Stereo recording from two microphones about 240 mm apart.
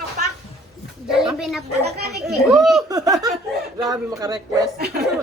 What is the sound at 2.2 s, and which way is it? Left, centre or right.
Speech, centre.